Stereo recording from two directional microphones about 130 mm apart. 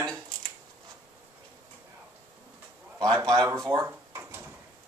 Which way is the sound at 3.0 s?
25° right (ahead or behind).